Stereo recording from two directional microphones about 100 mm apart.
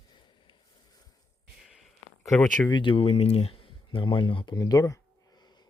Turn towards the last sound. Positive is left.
turn(degrees=45)  # may be behind; listen again after turning